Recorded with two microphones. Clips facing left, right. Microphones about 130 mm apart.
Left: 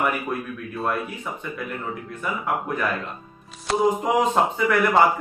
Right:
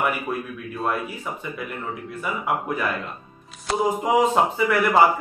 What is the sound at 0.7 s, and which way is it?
Speech, centre (ahead or behind).